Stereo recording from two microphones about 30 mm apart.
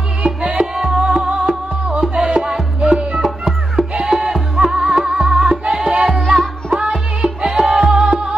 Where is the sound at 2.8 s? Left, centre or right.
Right.